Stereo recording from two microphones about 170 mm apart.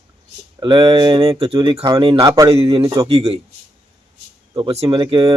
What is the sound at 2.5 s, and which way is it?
Speech, 35° right (ahead or behind).